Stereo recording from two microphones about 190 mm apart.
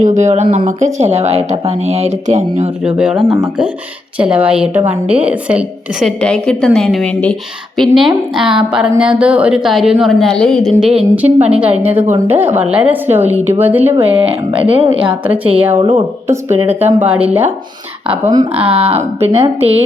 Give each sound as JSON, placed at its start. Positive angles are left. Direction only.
{"t": 0.0, "sound": "speech", "side_deg": -40}
{"t": 2.8, "sound": "a woman's voice", "side_deg": -5}
{"t": 14.6, "sound": "a woman's voice", "side_deg": -30}
{"t": 15.2, "sound": "a woman's voice", "side_deg": -10}
{"t": 15.8, "sound": "a woman's voice", "side_deg": -30}
{"t": 16.6, "sound": "a woman's voice", "side_deg": -10}
{"t": 18.3, "sound": "speech", "side_deg": -25}